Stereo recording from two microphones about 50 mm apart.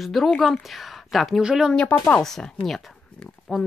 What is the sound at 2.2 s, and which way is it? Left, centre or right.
Speech, centre.